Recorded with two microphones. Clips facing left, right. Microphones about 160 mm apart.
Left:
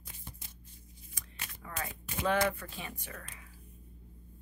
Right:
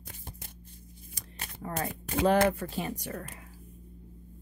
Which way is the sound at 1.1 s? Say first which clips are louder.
Right 4 dB; 40° right (ahead or behind).